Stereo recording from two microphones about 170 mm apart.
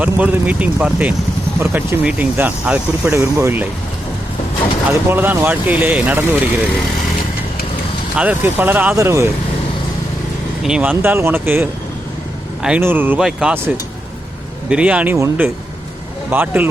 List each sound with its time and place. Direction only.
0.0 s speech: 10° right (ahead or behind)
4.9 s speech: 10° right (ahead or behind)
8.1 s speech: 10° right (ahead or behind)
10.6 s speech: 5° right (ahead or behind)
14.7 s speech: 5° right (ahead or behind)